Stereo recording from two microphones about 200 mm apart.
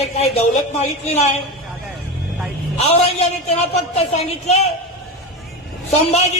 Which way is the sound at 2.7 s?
30° left (ahead or behind).